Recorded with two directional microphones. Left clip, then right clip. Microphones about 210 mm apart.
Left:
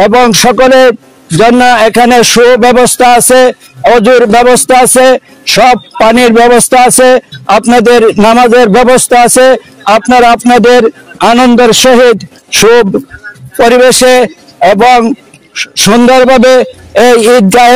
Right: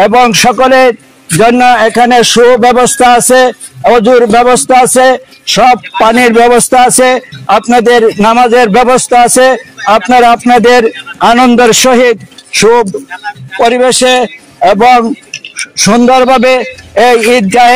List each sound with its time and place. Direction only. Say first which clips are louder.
0.0 s a man's voice: even; 40° left (ahead or behind)
11.9 s a man's voice: left 2 dB; 50° left (ahead or behind)